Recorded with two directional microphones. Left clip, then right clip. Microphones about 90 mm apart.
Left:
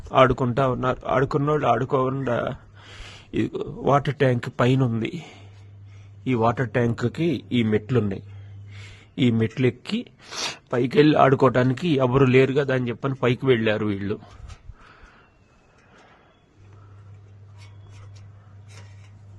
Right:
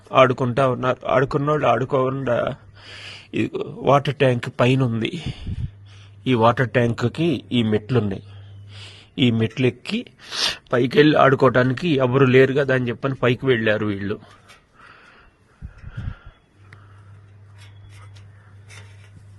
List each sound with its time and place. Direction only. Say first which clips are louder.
0.1 s speech: right 2 dB; centre (ahead or behind)
2.1 s speech: right 4 dB; 15° left (ahead or behind)
2.4 s speech: right 4 dB; centre (ahead or behind)
5.0 s speech: right 4 dB; 15° right (ahead or behind)
5.9 s a sound: right 4 dB; 35° right (ahead or behind)
6.7 s speech: right 3 dB; 5° right (ahead or behind)
10.5 s a sound: right 2 dB; 10° right (ahead or behind)
10.8 s speech: right 2 dB; centre (ahead or behind)
12.4 s speech: right 3 dB; centre (ahead or behind)
13.4 s speech: right 1 dB; 20° left (ahead or behind)
13.7 s speech: right 3 dB; 5° left (ahead or behind)
14.8 s a sound: right 4 dB; 15° left (ahead or behind)